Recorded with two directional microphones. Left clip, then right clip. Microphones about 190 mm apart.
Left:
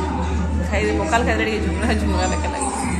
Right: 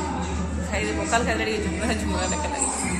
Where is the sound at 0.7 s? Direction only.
5° right (ahead or behind).